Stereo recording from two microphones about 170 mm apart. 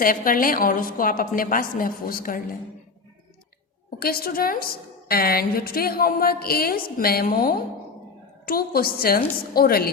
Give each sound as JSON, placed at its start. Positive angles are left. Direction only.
{"t": 0.0, "sound": "a woman's voice", "side_deg": 55}
{"t": 4.0, "sound": "a woman's voice", "side_deg": 60}